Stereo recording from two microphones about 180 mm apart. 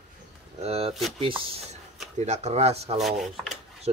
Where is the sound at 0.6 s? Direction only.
35° right (ahead or behind).